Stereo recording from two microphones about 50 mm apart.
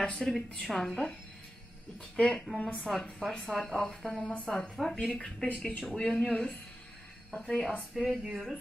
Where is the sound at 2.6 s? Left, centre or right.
Left.